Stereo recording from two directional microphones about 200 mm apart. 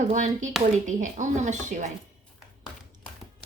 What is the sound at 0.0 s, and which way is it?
Speech, 35° right (ahead or behind).